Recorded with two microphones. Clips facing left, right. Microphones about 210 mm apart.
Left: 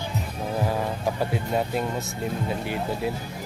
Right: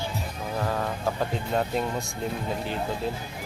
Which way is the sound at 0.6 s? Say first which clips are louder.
Left 1 dB; 10° left (ahead or behind).